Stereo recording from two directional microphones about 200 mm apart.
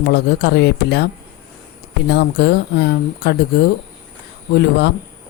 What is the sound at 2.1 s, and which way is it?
Speech, 55° left (ahead or behind).